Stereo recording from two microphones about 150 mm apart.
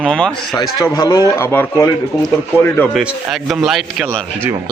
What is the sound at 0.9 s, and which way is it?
Speech, 20° left (ahead or behind).